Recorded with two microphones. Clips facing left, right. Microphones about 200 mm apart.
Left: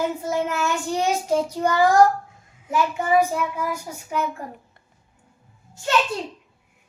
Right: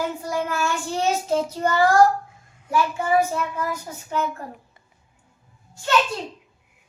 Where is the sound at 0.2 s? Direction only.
20° left (ahead or behind).